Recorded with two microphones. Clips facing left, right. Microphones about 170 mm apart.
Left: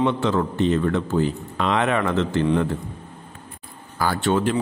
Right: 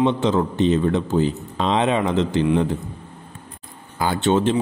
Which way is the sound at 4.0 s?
20° right (ahead or behind).